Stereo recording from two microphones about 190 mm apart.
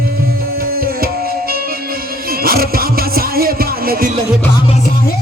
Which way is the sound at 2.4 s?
50° right (ahead or behind).